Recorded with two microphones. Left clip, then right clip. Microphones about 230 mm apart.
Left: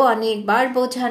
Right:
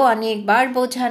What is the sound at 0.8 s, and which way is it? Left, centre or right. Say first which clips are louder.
Speech: right 1 dB; right.